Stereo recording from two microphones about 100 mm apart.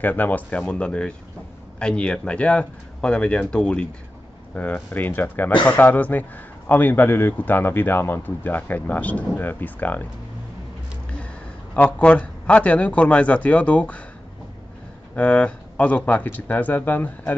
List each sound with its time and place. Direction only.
0.0 s a man's voice: 15° left (ahead or behind)
11.7 s a man's voice: 10° left (ahead or behind)
15.1 s a man's voice: 15° left (ahead or behind)